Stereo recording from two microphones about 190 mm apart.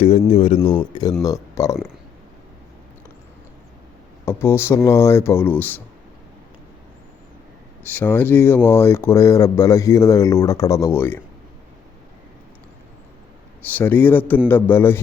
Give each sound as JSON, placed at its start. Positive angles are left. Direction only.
{"t": 0.0, "sound": "speech", "side_deg": 30}
{"t": 0.6, "sound": "speech", "side_deg": 10}
{"t": 4.3, "sound": "speech", "side_deg": 15}
{"t": 7.9, "sound": "speech", "side_deg": 10}
{"t": 13.7, "sound": "speech", "side_deg": 10}